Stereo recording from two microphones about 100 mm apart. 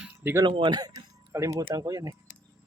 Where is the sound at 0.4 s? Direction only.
50° right (ahead or behind).